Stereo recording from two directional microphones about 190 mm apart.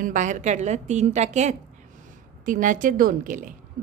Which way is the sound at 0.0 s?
40° right (ahead or behind).